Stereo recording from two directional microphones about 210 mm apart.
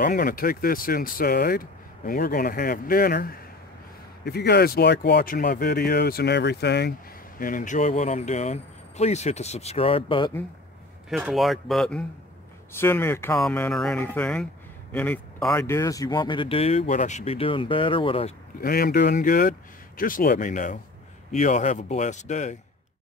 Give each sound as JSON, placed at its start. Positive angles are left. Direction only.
{"t": 0.0, "sound": "speech", "side_deg": 40}
{"t": 7.3, "sound": "speech", "side_deg": 40}
{"t": 11.1, "sound": "speech", "side_deg": 0}
{"t": 18.6, "sound": "speech", "side_deg": 45}